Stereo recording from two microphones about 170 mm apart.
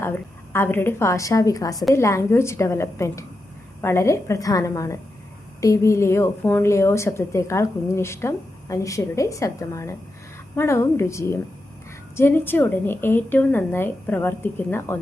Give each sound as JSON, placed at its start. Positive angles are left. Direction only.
{"t": 0.0, "sound": "a woman's voice", "side_deg": 15}